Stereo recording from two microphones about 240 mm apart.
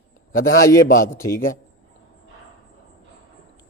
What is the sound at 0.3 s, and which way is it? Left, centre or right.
Speech, left.